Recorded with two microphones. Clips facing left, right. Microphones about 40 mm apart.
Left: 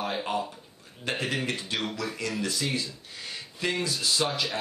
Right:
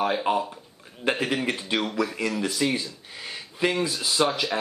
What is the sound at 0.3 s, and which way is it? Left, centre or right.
Speech, right.